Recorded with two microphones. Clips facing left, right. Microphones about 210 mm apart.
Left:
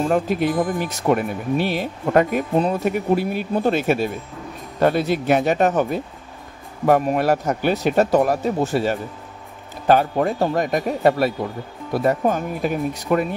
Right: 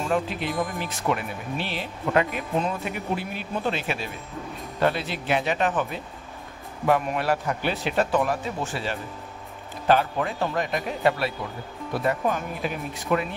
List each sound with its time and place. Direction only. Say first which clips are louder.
0.1 s speech: left 7 dB; 50° left (ahead or behind)